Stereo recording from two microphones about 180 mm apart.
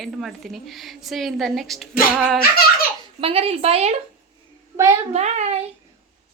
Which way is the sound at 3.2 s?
30° right (ahead or behind).